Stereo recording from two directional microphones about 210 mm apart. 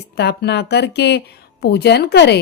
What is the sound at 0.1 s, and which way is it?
Speech, 50° left (ahead or behind).